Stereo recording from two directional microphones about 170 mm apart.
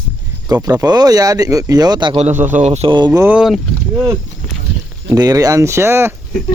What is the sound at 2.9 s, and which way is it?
Speech, 25° right (ahead or behind).